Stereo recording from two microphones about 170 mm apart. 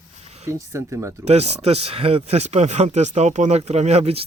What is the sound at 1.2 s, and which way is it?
Speech, 40° right (ahead or behind).